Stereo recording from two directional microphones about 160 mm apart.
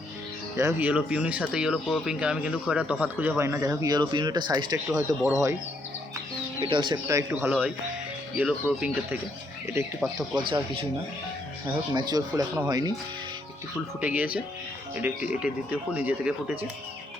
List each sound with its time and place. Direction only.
0.5 s speech: 20° right (ahead or behind)
0.9 s speech: 5° right (ahead or behind)
6.7 s speech: 30° right (ahead or behind); by 9.1 s 10° right (ahead or behind)
10.0 s speech: centre (ahead or behind)
11.9 s speech: 25° right (ahead or behind)
12.3 s speech: 10° right (ahead or behind)
12.6 s speech: 25° right (ahead or behind)
14.0 s speech: 10° right (ahead or behind)